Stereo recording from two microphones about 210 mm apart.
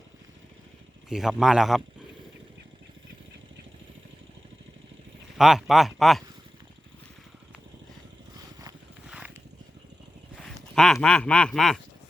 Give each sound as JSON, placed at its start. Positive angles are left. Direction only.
{"t": 1.1, "sound": "speech", "side_deg": 0}
{"t": 5.4, "sound": "speech", "side_deg": 0}
{"t": 9.0, "sound": "vehicle", "side_deg": -5}
{"t": 10.3, "sound": "a sound", "side_deg": 0}
{"t": 11.0, "sound": "speech", "side_deg": 5}